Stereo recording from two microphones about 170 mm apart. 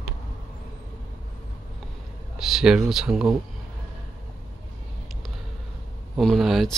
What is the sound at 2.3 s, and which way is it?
Speech, 5° right (ahead or behind).